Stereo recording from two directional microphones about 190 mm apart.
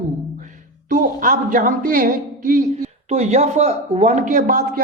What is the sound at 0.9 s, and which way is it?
A man's voice, 45° right (ahead or behind).